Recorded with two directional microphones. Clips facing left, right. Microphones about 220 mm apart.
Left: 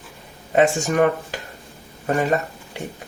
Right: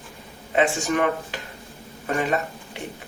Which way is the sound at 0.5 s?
40° left (ahead or behind).